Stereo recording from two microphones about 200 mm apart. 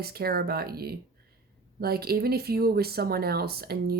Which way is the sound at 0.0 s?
50° right (ahead or behind).